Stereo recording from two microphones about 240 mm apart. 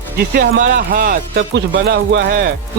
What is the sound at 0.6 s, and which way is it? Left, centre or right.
Speech, right.